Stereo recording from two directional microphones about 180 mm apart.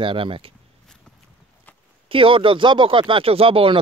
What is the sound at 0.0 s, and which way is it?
Speech, 30° right (ahead or behind).